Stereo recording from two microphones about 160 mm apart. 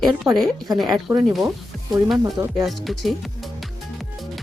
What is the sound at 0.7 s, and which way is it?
Speech, centre (ahead or behind).